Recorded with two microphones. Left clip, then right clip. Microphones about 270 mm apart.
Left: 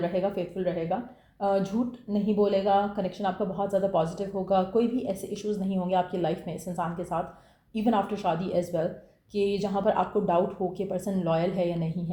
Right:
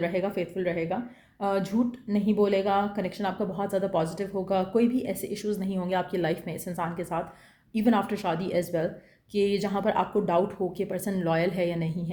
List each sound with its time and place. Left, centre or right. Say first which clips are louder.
0.0 s speech: even; right